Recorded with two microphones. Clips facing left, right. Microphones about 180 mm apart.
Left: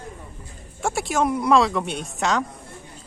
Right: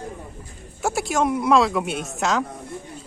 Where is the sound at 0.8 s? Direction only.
Centre (ahead or behind).